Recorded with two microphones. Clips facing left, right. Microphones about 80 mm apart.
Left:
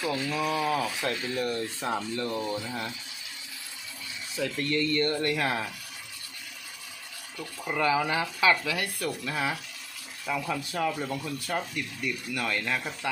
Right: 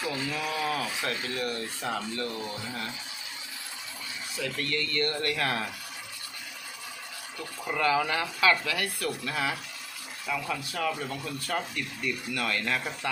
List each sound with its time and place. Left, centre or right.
0.0 s speech: centre
0.5 s speech: centre
4.4 s speech: left
7.3 s speech: centre
10.5 s speech: left
11.4 s speech: centre